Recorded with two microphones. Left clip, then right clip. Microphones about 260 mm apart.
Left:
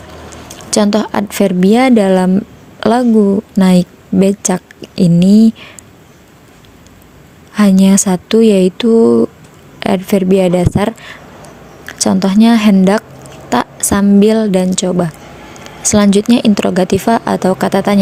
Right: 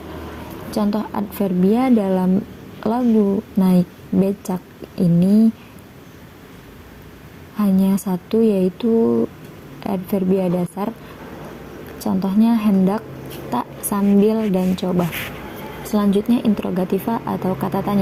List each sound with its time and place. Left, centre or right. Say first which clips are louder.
0.7 s a woman's voice: left 10 dB; left
7.5 s a woman's voice: left 10 dB; left
12.0 s a woman's voice: left 9 dB; left